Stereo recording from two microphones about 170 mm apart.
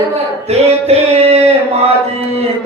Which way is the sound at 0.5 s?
40° right (ahead or behind).